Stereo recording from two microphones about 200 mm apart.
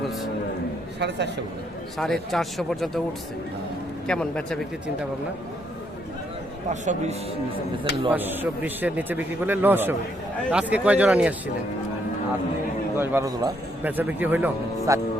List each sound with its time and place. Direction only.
0.9 s speech: 60° right (ahead or behind)
2.0 s speech: centre (ahead or behind)
4.0 s speech: 5° left (ahead or behind)
6.7 s a man's voice: 35° right (ahead or behind)
8.1 s a man's voice: 10° right (ahead or behind)
13.0 s a man's voice: 15° right (ahead or behind)